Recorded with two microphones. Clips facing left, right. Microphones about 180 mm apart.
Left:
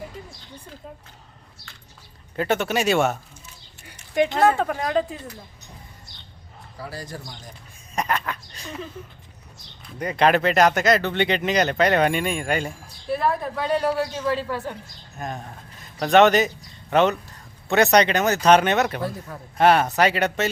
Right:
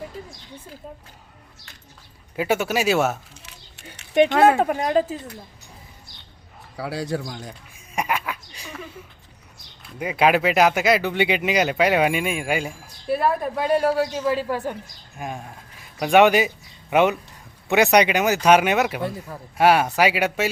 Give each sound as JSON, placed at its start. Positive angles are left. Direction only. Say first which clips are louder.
{"t": 2.3, "sound": "speech", "louder": "right 1 dB", "side_deg": -10}
{"t": 3.4, "sound": "a sound", "louder": "right 1 dB", "side_deg": -75}
{"t": 4.1, "sound": "speech", "louder": "right 3 dB", "side_deg": -20}
{"t": 6.7, "sound": "speech", "louder": "right 8 dB", "side_deg": -70}
{"t": 7.9, "sound": "speech", "louder": "even", "side_deg": -10}
{"t": 9.8, "sound": "a man's voice", "louder": "even", "side_deg": -5}